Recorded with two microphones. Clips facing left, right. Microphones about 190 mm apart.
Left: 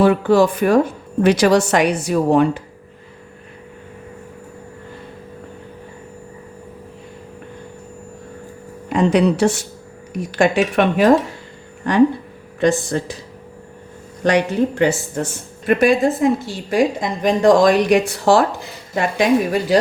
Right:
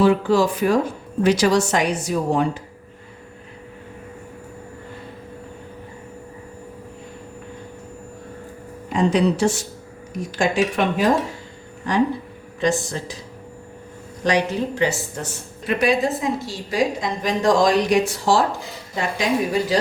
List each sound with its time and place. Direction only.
0.0 s a woman's voice: 60° left (ahead or behind)
8.9 s a woman's voice: 60° left (ahead or behind)
14.3 s a woman's voice: 55° left (ahead or behind)